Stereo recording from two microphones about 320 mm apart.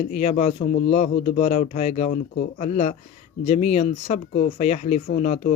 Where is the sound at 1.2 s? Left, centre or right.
Left.